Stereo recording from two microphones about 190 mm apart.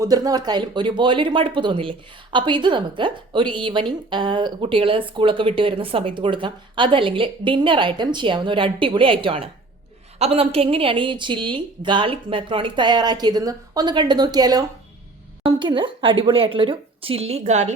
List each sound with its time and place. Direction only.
0.0 s speech: 20° right (ahead or behind); by 17.7 s 35° right (ahead or behind)